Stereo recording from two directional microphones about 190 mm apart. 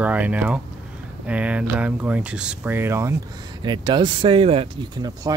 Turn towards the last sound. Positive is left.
turn(degrees=-30)  # may be behind; listen again after turning